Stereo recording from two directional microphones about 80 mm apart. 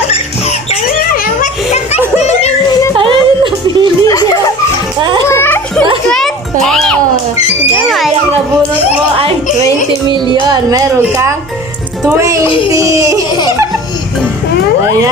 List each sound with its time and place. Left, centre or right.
2.9 s music: right
4.0 s children playing: left
4.9 s music: right
5.2 s children playing: left
6.1 s music: centre
7.9 s children playing: centre
10.4 s speech: right
11.1 s speech: right